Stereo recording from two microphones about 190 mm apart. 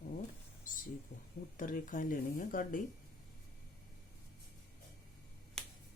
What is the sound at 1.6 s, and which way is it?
Speech, 45° left (ahead or behind).